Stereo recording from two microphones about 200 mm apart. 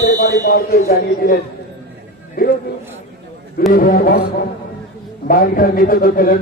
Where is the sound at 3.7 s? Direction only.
45° left (ahead or behind).